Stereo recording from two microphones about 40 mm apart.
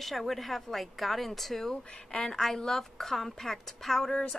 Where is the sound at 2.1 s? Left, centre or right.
Centre.